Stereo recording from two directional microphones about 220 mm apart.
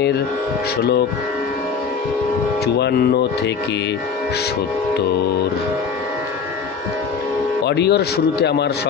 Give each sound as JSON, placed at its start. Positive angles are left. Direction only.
{"t": 2.6, "sound": "speech", "side_deg": 50}
{"t": 7.6, "sound": "speech", "side_deg": 50}